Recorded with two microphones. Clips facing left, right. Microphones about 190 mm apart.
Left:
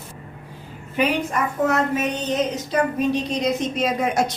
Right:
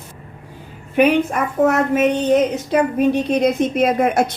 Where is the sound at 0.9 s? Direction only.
55° right (ahead or behind).